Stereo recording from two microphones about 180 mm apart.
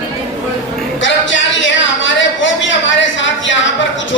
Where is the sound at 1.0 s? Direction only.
90° left.